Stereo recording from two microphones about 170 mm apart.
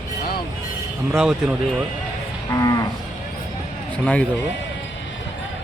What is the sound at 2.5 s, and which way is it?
Moo, 20° left (ahead or behind).